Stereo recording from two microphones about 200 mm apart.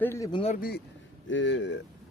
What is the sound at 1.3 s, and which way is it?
Speech, 65° left (ahead or behind).